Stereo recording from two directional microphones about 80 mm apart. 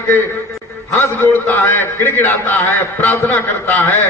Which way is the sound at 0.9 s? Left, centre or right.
Left.